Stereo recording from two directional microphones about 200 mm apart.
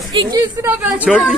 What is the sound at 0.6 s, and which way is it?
Speech, 10° right (ahead or behind).